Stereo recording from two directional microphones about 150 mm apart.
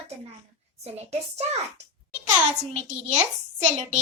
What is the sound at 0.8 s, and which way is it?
Speech, 45° right (ahead or behind).